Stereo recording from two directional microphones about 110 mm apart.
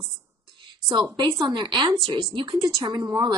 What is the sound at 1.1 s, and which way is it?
A woman's voice, 45° right (ahead or behind).